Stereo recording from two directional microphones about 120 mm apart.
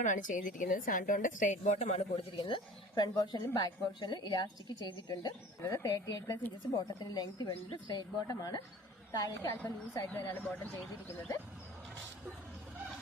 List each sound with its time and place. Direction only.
0.0 s a woman's voice: 90° left; by 2.0 s 65° left (ahead or behind)
2.4 s a woman's voice: 40° left (ahead or behind); by 10.7 s 15° left (ahead or behind)